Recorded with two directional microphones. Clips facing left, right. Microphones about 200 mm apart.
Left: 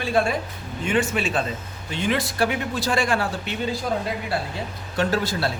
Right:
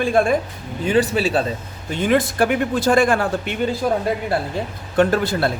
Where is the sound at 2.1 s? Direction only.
50° right (ahead or behind).